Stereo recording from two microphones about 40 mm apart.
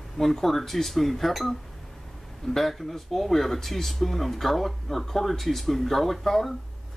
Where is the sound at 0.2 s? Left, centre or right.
Centre.